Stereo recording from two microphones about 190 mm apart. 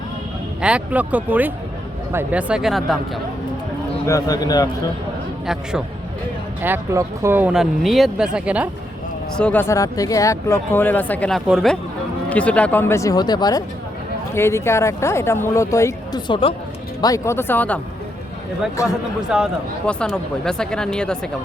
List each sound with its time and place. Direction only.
0.6 s speech: 5° right (ahead or behind)
4.0 s speech: 20° left (ahead or behind)
6.6 s speech: 15° right (ahead or behind)
9.4 s speech: 10° left (ahead or behind); by 16.6 s 25° left (ahead or behind)
17.0 s speech: 15° left (ahead or behind)
18.8 s speech: 15° left (ahead or behind)
19.3 s speech: 5° right (ahead or behind)